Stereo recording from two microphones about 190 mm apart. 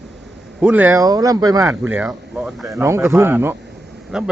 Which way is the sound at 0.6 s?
10° right (ahead or behind).